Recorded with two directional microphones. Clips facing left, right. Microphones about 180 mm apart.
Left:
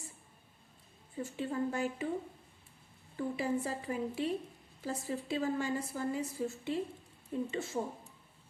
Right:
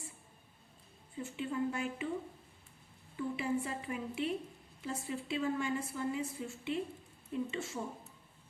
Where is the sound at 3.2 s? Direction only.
35° left (ahead or behind).